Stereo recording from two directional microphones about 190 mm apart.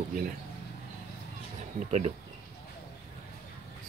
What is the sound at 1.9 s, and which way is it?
Speech, 35° right (ahead or behind).